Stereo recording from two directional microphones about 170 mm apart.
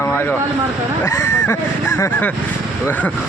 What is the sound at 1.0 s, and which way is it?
Speech, 15° left (ahead or behind).